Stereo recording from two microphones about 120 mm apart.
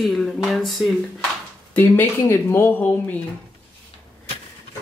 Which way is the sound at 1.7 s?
15° left (ahead or behind).